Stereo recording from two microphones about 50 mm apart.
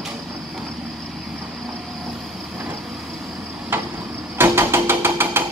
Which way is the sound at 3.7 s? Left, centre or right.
Right.